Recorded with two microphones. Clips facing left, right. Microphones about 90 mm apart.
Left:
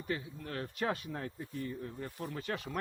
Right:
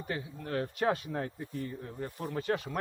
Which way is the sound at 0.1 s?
50° right (ahead or behind).